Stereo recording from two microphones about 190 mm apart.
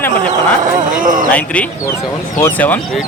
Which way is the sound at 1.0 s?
45° right (ahead or behind).